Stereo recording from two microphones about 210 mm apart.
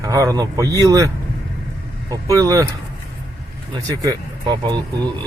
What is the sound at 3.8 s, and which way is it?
Speech, 15° right (ahead or behind).